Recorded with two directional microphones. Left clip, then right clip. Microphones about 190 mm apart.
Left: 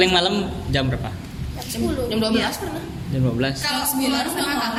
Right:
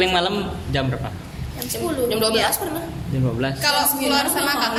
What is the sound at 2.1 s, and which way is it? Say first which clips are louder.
Speech: right 3 dB; 45° right (ahead or behind).